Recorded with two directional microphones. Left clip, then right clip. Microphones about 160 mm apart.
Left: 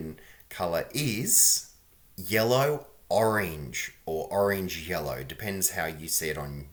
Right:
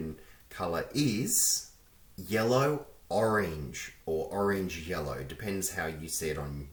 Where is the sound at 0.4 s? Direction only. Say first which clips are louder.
Left 4 dB; 15° left (ahead or behind).